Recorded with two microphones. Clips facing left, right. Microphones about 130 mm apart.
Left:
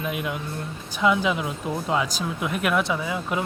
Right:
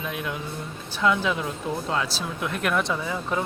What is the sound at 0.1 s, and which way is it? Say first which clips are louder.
Speech: left 2 dB; 10° left (ahead or behind).